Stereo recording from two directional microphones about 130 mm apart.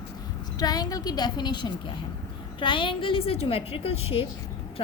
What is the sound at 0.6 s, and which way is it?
A woman's voice, 30° left (ahead or behind).